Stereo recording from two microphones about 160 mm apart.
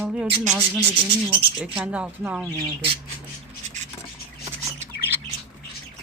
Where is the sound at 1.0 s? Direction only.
30° right (ahead or behind).